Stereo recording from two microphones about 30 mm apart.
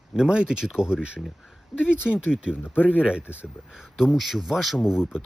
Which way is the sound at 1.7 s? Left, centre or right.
Centre.